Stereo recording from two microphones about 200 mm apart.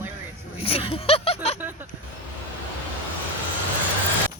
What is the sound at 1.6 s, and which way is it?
Speech, 10° right (ahead or behind).